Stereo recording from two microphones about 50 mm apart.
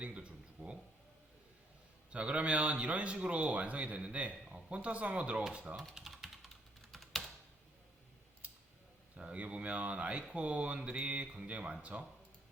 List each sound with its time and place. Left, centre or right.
0.0 s a sound: right
2.0 s speech: right
5.9 s typing: centre
9.1 s speech: right